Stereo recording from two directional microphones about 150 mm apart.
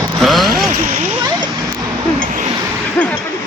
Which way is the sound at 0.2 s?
Centre (ahead or behind).